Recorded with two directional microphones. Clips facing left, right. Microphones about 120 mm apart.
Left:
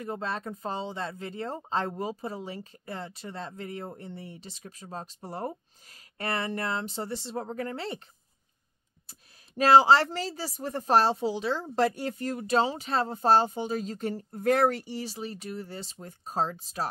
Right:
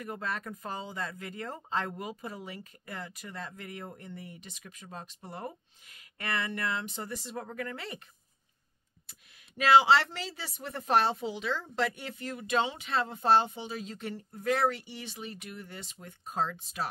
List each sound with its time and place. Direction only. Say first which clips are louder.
0.0 s speech: left 3 dB; 30° left (ahead or behind)
9.6 s speech: left 3 dB; 40° left (ahead or behind)